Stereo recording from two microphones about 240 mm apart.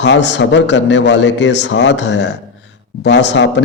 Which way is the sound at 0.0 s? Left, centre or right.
Left.